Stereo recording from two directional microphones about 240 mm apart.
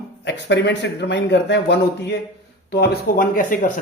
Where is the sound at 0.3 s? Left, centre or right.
Left.